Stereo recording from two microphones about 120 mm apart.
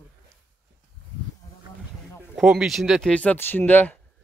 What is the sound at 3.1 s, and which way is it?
Speech, 15° left (ahead or behind).